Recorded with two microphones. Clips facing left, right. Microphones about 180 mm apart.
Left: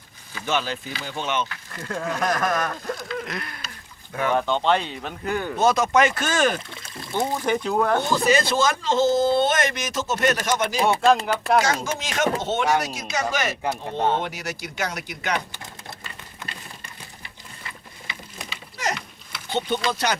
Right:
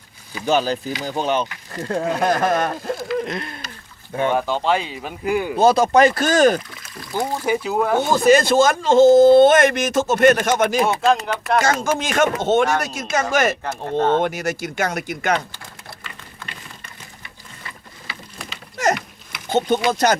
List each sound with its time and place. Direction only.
0.4 s speech: 35° right (ahead or behind)
3.2 s a sound: 25° right (ahead or behind)
4.1 s speech: 25° right (ahead or behind)
4.4 s speech: 5° right (ahead or behind)
5.5 s speech: 30° right (ahead or behind)
6.7 s a sound: 25° left (ahead or behind)
7.4 s speech: 5° right (ahead or behind)
8.1 s speech: 50° right (ahead or behind)
13.6 s speech: 15° left (ahead or behind)
14.2 s speech: 50° right (ahead or behind)
19.5 s speech: 45° right (ahead or behind)